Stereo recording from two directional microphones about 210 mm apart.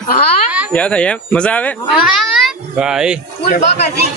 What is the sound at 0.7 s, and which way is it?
A child's voice, 5° left (ahead or behind).